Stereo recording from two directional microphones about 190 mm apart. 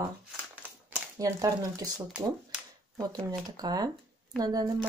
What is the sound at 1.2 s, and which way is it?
Speech, 20° right (ahead or behind).